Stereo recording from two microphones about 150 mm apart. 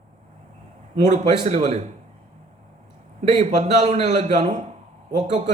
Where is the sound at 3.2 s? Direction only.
50° right (ahead or behind).